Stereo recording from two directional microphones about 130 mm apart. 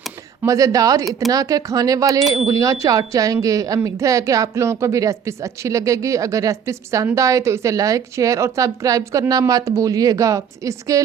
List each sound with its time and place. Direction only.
0.4 s a woman's voice: 25° right (ahead or behind)